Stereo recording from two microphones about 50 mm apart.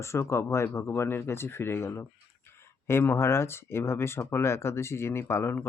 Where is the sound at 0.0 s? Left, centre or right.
Left.